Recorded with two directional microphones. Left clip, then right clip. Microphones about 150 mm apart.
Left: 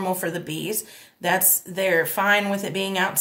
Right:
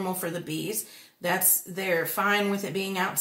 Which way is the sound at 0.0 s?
55° left (ahead or behind).